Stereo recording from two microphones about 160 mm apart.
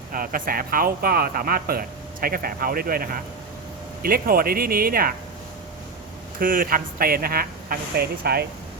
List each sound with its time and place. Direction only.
0.1 s speech: 60° right (ahead or behind)
6.4 s speech: 60° right (ahead or behind); by 8.4 s 80° right